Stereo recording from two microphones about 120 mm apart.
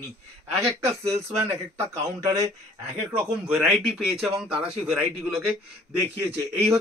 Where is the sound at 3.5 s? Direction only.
5° right (ahead or behind).